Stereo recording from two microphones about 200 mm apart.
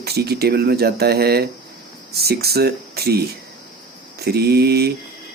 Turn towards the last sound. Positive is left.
turn(degrees=-50)  # may be behind; listen again after turning